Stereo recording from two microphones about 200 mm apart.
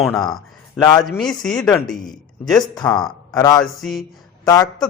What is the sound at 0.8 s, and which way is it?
Speech, 20° left (ahead or behind).